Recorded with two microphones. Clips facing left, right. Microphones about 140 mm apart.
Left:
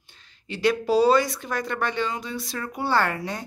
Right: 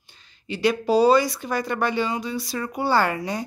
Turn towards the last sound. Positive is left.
turn(degrees=0)  # may be behind; listen again after turning